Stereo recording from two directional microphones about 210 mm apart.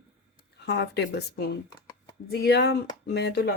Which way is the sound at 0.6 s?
55° left (ahead or behind).